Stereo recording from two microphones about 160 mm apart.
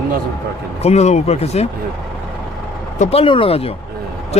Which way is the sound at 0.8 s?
40° left (ahead or behind).